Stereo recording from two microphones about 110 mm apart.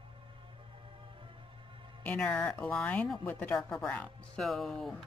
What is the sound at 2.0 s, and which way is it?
Speech, 10° left (ahead or behind).